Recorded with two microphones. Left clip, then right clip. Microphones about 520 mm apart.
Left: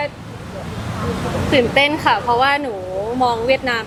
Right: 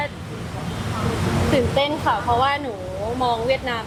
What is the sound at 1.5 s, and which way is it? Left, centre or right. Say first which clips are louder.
Speech: left 7 dB; centre.